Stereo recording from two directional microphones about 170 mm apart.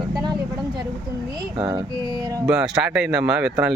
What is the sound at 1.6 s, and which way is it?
Music, 25° right (ahead or behind).